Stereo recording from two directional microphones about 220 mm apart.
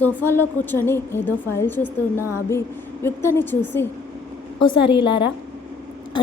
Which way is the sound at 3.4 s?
10° left (ahead or behind).